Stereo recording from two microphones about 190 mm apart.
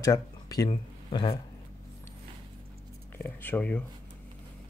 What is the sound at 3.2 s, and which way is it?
Speech, 10° left (ahead or behind).